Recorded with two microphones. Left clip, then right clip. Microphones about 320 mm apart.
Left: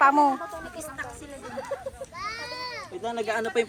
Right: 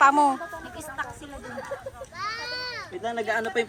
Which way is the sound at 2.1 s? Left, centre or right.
Right.